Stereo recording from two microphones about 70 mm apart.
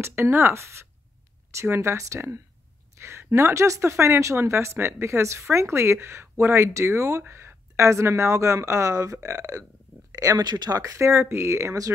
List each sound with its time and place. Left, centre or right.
0.0 s a woman's voice: right
10.4 s speech: right
11.1 s speech: right